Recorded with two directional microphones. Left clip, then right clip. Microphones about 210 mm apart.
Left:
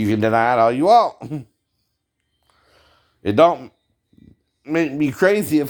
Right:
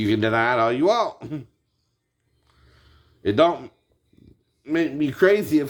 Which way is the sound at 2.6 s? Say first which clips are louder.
Left 4 dB; 50° left (ahead or behind).